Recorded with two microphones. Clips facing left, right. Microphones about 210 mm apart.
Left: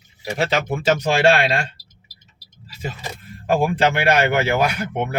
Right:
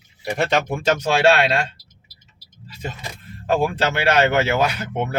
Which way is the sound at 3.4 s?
10° left (ahead or behind).